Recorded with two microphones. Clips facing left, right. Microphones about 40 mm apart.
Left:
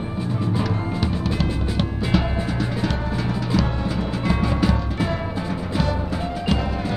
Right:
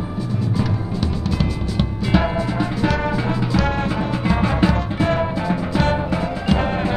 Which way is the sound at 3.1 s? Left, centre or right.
Right.